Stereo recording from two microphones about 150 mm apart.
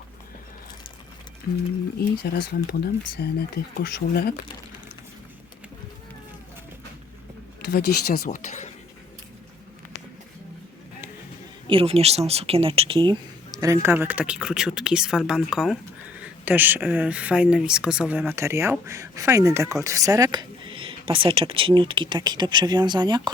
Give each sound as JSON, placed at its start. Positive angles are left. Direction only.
{"t": 2.3, "sound": "speech", "side_deg": 90}
{"t": 7.7, "sound": "speech", "side_deg": 90}
{"t": 11.7, "sound": "speech", "side_deg": -40}
{"t": 13.6, "sound": "speech", "side_deg": -20}